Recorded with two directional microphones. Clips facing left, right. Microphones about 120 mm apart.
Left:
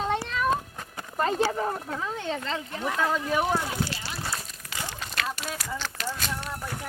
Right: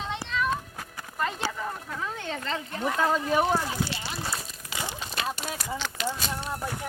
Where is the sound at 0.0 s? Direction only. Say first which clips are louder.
Left 3 dB; 45° left (ahead or behind).